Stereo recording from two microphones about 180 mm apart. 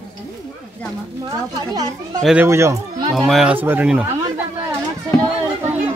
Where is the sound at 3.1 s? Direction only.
Centre (ahead or behind).